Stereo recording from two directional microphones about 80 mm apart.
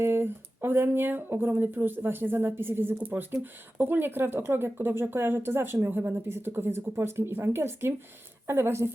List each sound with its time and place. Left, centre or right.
0.0 s a woman's voice: right